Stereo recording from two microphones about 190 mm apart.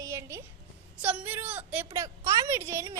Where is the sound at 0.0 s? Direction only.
15° right (ahead or behind).